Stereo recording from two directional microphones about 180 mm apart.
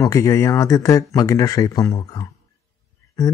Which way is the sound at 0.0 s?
15° left (ahead or behind).